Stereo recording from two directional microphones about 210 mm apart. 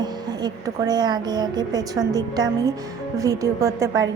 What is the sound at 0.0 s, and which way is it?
A woman's voice, 20° right (ahead or behind).